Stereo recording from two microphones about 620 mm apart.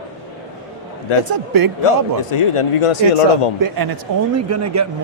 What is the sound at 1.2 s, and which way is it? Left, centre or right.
Speech, right.